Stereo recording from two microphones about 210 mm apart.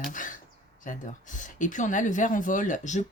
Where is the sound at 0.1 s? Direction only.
40° left (ahead or behind).